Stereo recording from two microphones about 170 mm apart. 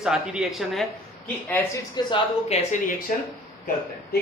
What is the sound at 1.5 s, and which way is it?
Speech, 15° left (ahead or behind).